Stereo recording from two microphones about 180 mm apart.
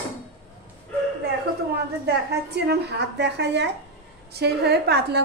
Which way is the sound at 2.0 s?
65° right (ahead or behind).